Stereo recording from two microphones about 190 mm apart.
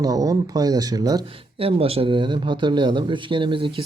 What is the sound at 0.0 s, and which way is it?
Speech, 20° right (ahead or behind).